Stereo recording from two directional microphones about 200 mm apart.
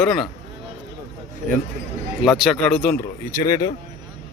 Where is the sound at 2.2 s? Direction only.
Centre (ahead or behind).